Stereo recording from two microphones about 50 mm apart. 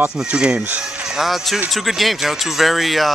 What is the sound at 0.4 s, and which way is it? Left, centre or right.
Speech, centre.